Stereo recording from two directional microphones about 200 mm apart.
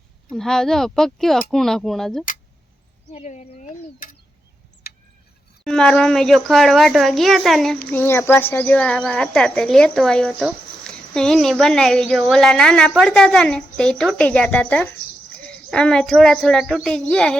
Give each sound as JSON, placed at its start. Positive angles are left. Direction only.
{"t": 0.3, "sound": "speech", "side_deg": 0}
{"t": 3.1, "sound": "speech", "side_deg": 35}
{"t": 4.9, "sound": "a sound", "side_deg": 50}
{"t": 5.6, "sound": "speech", "side_deg": 5}